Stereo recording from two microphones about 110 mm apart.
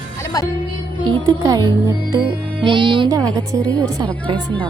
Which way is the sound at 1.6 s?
45° right (ahead or behind).